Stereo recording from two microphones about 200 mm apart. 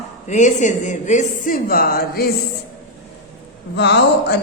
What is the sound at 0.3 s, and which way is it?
Speech, 35° left (ahead or behind).